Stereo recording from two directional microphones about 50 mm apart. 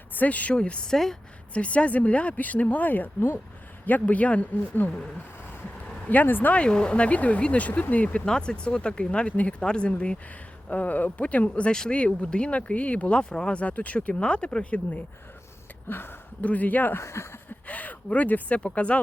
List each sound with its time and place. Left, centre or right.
0.1 s speech: left
0.5 s speech: centre
6.1 s speech: left
6.5 s speech: centre
8.2 s speech: centre
15.9 s speech: left
16.4 s speech: left
16.9 s speech: left
17.7 s speech: left